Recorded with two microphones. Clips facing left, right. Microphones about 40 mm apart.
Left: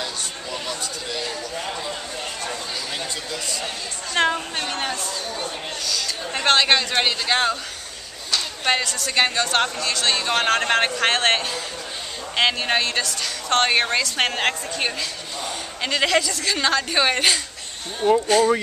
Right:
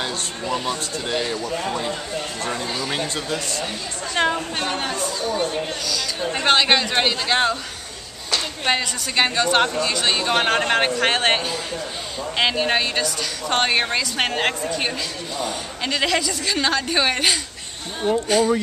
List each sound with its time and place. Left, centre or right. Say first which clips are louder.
0.0 s speech: right 3 dB; right
2.4 s a sound: right 4 dB; right
3.3 s speech: right 3 dB; right
4.1 s a woman's voice: even; centre
18.0 s speech: left 3 dB; centre